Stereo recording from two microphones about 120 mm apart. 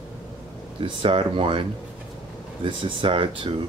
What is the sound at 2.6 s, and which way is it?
Speech, 45° right (ahead or behind).